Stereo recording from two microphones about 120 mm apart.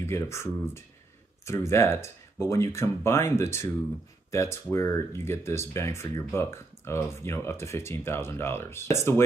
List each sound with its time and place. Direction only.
0.0 s speech: 20° left (ahead or behind)